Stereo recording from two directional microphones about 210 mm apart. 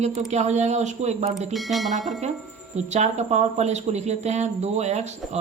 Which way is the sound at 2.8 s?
30° right (ahead or behind).